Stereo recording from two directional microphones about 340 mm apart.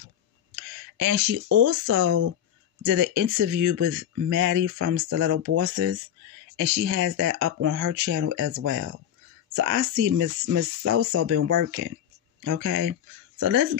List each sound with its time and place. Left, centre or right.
0.6 s a sound: right
1.5 s speech: right
2.0 s speech: right
2.9 s speech: right